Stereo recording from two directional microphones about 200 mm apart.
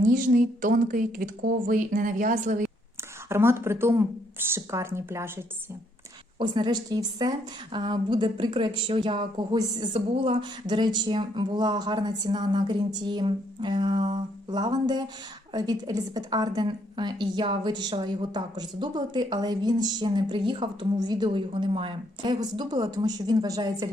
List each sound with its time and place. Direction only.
0.0 s speech: 40° right (ahead or behind)
3.2 s speech: 10° right (ahead or behind)
6.4 s a woman's voice: 20° right (ahead or behind)